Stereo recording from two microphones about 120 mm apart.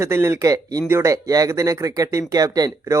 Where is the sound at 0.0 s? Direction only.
20° right (ahead or behind).